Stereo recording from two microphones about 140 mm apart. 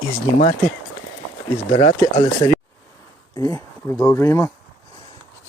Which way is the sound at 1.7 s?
50° left (ahead or behind).